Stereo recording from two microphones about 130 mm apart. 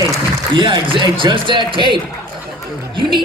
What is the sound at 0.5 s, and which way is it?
Speech, 35° right (ahead or behind).